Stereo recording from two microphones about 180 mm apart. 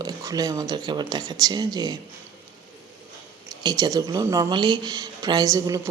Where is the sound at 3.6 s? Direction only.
20° right (ahead or behind).